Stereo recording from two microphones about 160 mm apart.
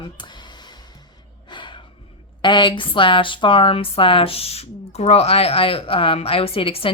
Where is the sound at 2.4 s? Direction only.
30° left (ahead or behind).